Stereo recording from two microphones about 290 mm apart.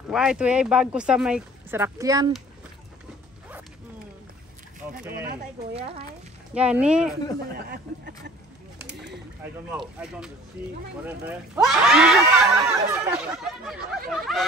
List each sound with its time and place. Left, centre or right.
0.1 s speech: centre
5.7 s speech: centre
6.5 s speech: centre
7.5 s speech: right
8.8 s a sound: right
9.7 s speech: centre